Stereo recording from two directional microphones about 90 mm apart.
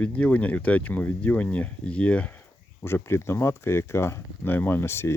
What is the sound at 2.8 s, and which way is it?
Speech, 25° left (ahead or behind).